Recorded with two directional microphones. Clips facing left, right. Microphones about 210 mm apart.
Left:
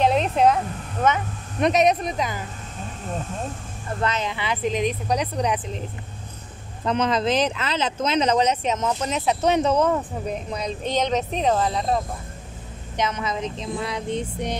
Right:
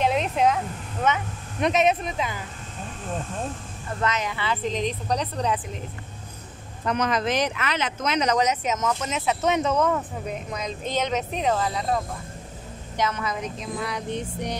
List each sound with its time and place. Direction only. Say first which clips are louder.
0.0 s vehicle: left 3 dB; 35° left (ahead or behind)
1.0 s speech: left 3 dB; 40° left (ahead or behind)
4.0 s speech: left 1 dB; 30° left (ahead or behind); by 5.6 s 15° left (ahead or behind)
6.8 s speech: left 2 dB; 30° left (ahead or behind)